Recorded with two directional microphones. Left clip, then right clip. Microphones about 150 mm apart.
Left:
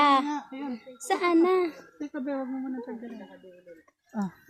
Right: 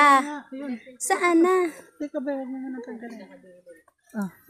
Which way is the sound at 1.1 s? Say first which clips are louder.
Right 3 dB; 5° right (ahead or behind).